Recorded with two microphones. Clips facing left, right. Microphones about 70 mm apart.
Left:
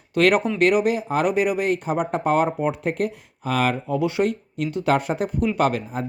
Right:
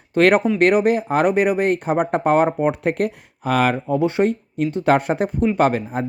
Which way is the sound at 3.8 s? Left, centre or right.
Right.